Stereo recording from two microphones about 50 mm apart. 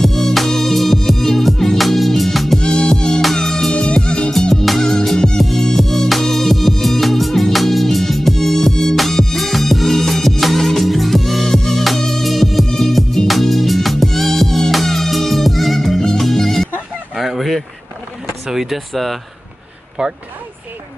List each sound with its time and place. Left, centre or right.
0.0 s music: centre
2.6 s music: centre
3.2 s music: centre
3.7 s music: centre
4.3 s music: centre
17.1 s a sound: centre
18.5 s speech: centre
20.0 s speech: centre